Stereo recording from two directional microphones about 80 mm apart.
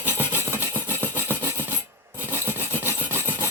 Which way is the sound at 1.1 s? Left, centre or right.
Right.